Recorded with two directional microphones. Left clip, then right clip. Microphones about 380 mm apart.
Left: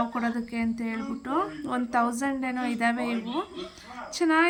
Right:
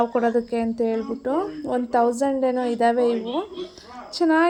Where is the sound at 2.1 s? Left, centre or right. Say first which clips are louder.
Right 9 dB; centre.